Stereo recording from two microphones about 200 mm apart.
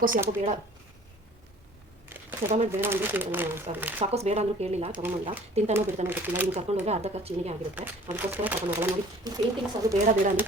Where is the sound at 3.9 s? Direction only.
30° right (ahead or behind).